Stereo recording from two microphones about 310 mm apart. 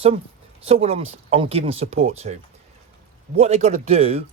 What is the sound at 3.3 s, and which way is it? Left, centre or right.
Speech, right.